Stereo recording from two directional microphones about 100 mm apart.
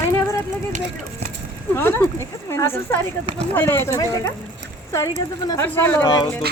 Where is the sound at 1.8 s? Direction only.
20° left (ahead or behind).